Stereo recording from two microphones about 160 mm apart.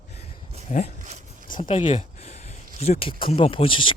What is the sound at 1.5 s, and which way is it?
Speech, 30° left (ahead or behind).